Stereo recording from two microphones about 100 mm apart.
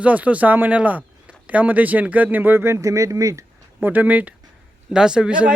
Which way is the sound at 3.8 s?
15° right (ahead or behind).